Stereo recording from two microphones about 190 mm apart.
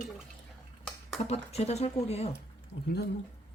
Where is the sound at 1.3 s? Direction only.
35° left (ahead or behind).